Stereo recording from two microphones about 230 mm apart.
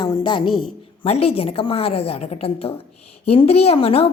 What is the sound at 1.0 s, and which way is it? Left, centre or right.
A woman's voice, left.